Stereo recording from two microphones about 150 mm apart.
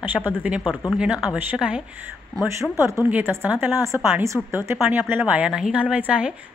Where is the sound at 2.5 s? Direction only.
20° right (ahead or behind).